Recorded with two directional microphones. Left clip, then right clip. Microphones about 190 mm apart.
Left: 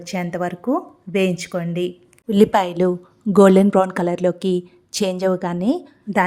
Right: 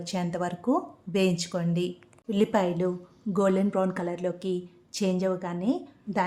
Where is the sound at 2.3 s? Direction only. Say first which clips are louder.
Left 9 dB; 45° left (ahead or behind).